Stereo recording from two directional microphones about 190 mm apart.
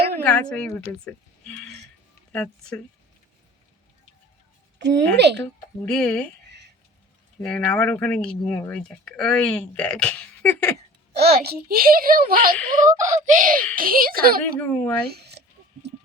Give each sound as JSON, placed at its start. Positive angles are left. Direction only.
{"t": 0.2, "sound": "a sound", "side_deg": 10}
{"t": 0.5, "sound": "speech", "side_deg": 5}
{"t": 4.8, "sound": "speech", "side_deg": -65}
{"t": 5.4, "sound": "speech", "side_deg": 5}
{"t": 7.4, "sound": "speech", "side_deg": 5}
{"t": 11.4, "sound": "a child's voice", "side_deg": -55}
{"t": 14.6, "sound": "speech", "side_deg": 10}
{"t": 15.0, "sound": "a sound", "side_deg": -60}